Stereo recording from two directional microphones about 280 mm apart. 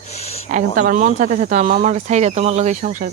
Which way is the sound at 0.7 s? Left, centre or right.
Right.